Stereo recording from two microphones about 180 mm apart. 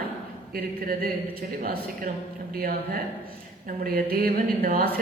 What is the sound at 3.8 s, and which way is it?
A man's voice, 55° right (ahead or behind).